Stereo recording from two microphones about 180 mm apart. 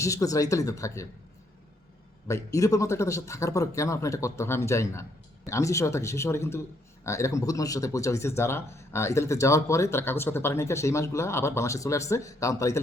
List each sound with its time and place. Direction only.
0.0 s speech: 20° left (ahead or behind)
2.2 s speech: 15° left (ahead or behind)